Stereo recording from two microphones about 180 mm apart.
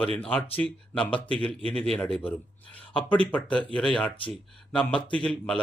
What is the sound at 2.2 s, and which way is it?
Speech, 30° left (ahead or behind).